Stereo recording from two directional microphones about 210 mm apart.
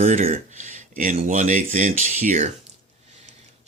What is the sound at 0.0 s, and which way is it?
Speech, 35° right (ahead or behind).